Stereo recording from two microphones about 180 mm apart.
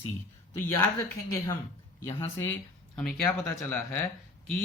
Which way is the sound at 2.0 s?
15° left (ahead or behind).